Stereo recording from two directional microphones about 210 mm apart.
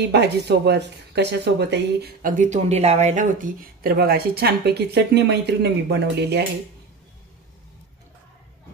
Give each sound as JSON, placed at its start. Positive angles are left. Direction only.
{"t": 0.1, "sound": "speech", "side_deg": -55}